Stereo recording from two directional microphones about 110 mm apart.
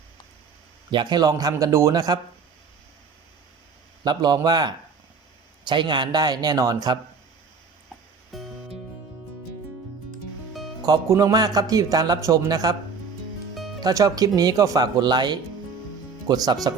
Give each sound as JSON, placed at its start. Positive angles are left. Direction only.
{"t": 0.9, "sound": "speech", "side_deg": -45}
{"t": 4.0, "sound": "speech", "side_deg": -40}
{"t": 8.3, "sound": "music", "side_deg": 0}
{"t": 11.1, "sound": "speech", "side_deg": -35}
{"t": 13.8, "sound": "speech", "side_deg": -35}